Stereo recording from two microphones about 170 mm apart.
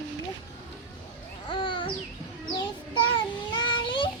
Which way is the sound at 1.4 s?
30° left (ahead or behind).